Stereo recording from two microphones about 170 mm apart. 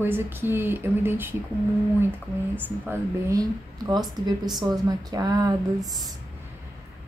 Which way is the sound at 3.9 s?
25° right (ahead or behind).